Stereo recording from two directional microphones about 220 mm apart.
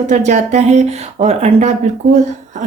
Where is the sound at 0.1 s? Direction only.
30° right (ahead or behind).